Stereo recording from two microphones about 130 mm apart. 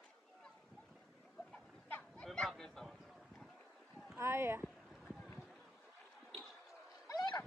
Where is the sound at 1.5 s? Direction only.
10° left (ahead or behind).